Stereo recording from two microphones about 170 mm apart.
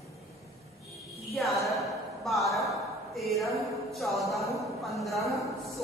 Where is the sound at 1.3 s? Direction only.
Centre (ahead or behind).